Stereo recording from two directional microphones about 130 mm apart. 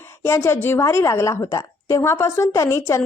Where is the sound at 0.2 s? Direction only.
20° left (ahead or behind).